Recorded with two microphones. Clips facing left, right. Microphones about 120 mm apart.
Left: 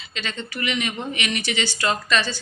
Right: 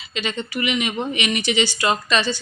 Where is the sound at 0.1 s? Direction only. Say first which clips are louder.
Right 5 dB; 15° right (ahead or behind).